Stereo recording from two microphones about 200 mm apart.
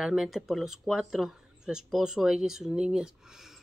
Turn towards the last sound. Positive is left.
turn(degrees=0)  # may be behind; listen again after turning